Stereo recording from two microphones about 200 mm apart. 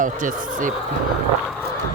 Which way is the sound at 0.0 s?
40° right (ahead or behind).